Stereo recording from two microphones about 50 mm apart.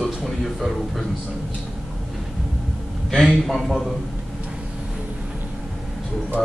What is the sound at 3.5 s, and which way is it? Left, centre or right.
Speech, centre.